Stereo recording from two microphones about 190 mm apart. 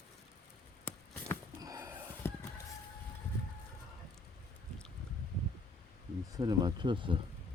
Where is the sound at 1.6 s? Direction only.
20° right (ahead or behind).